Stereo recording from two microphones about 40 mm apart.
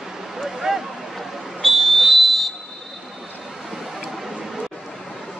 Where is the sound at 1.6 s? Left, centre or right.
Centre.